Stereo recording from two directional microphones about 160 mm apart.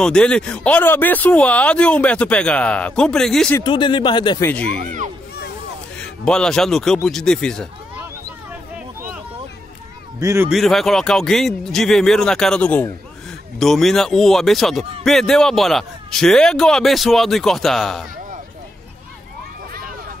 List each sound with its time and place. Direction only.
0.0 s speech: 5° left (ahead or behind)
3.6 s a man's voice: 30° left (ahead or behind)
4.5 s speech: 10° left (ahead or behind)
5.9 s a man's voice: 5° left (ahead or behind)
10.2 s speech: 15° right (ahead or behind)
10.5 s a man's voice: centre (ahead or behind)